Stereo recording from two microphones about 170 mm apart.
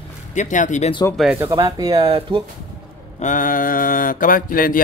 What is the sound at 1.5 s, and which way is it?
Speech, 25° right (ahead or behind).